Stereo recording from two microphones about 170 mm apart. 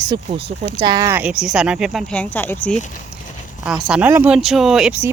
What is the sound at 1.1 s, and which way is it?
Speech, 10° right (ahead or behind).